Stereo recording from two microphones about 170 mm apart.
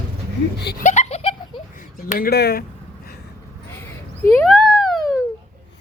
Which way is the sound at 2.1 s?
65° left (ahead or behind).